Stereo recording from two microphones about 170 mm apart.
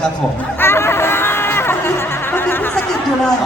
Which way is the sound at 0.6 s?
15° left (ahead or behind).